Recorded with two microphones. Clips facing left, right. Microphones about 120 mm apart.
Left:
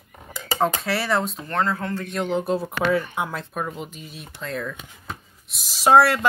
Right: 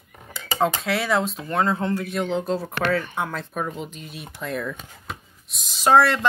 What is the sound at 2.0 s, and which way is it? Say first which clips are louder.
Speech: even; centre (ahead or behind).